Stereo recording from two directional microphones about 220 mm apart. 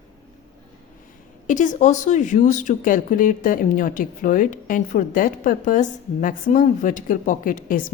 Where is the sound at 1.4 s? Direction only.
35° left (ahead or behind).